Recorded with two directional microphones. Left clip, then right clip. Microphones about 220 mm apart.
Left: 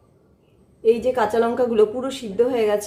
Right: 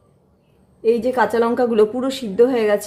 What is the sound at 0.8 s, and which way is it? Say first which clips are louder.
A woman's voice: right 1 dB; 30° right (ahead or behind).